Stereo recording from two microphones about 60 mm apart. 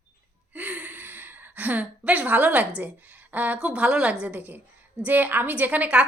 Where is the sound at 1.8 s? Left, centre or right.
Right.